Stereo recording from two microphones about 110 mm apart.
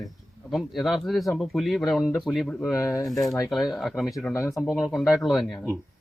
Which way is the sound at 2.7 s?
30° left (ahead or behind).